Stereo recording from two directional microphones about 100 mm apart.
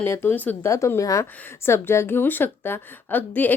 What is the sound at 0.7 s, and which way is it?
Speech, 30° left (ahead or behind).